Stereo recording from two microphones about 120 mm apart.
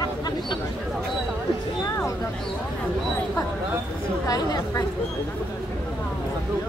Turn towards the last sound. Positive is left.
turn(degrees=30)  # may be behind; listen again after turning